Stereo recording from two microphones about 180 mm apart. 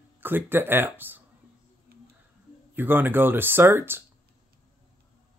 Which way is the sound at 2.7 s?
10° right (ahead or behind).